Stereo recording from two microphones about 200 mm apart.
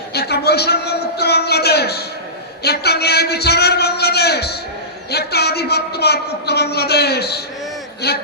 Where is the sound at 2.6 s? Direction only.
55° left (ahead or behind).